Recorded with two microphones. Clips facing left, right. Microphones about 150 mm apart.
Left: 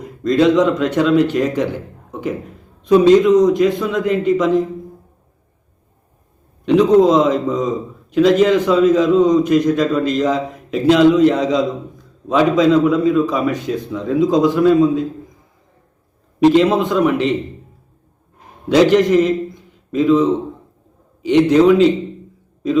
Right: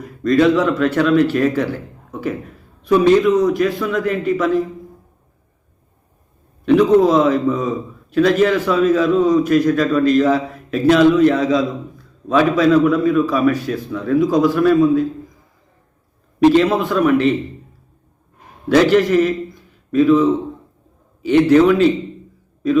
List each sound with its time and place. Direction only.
0.0 s speech: 20° left (ahead or behind)
6.7 s a man's voice: 20° left (ahead or behind)
16.4 s a man's voice: 20° left (ahead or behind)
18.7 s a man's voice: 15° left (ahead or behind)